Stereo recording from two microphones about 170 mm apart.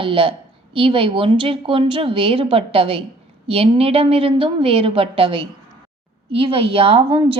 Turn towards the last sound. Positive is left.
turn(degrees=-30)  # may be behind; listen again after turning